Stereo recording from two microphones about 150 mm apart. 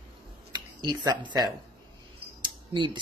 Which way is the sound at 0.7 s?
30° right (ahead or behind).